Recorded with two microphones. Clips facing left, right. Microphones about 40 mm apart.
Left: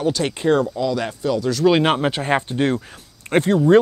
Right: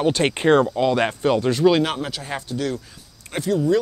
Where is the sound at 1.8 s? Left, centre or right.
Left.